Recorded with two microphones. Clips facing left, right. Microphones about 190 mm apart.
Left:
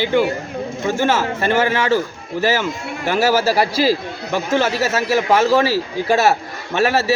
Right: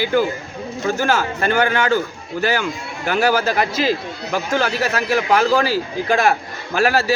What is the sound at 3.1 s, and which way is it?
A man's voice, 5° left (ahead or behind).